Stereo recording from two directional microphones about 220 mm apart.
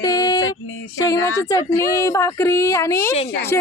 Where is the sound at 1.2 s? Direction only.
70° left (ahead or behind).